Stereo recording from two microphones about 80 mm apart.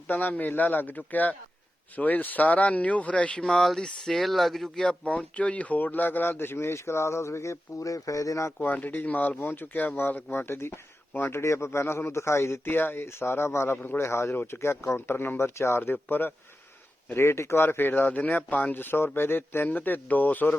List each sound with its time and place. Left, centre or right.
0.1 s speech: left
8.5 s speech: left